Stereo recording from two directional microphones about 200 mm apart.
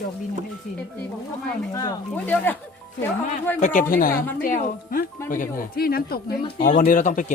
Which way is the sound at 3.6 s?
40° left (ahead or behind).